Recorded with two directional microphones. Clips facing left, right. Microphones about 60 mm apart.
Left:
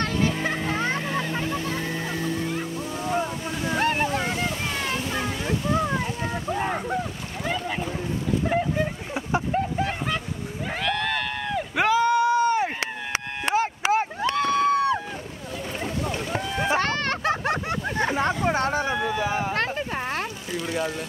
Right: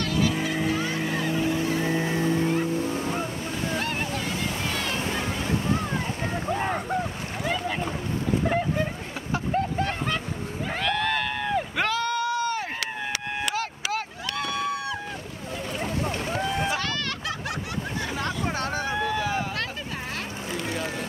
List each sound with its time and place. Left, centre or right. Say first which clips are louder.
0.0 s music: left 1 dB; left
1.0 s waves: even; centre
1.4 s music: right 3 dB; centre
3.7 s boat: left 9 dB; left
6.5 s boat: left 1 dB; centre
8.5 s vehicle: left 1 dB; centre
10.8 s a sound: even; centre
11.7 s a sound: left 6 dB; centre; by 15.0 s left
16.6 s a sound: left 5 dB; left
18.9 s a sound: left 1 dB; centre
19.2 s vehicle: left 2 dB; left
19.5 s vehicle: left 6 dB; left